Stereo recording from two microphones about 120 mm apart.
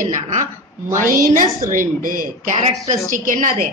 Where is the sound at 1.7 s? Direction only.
90° right.